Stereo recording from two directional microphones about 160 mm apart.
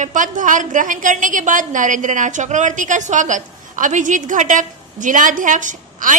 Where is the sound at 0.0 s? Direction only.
55° right (ahead or behind).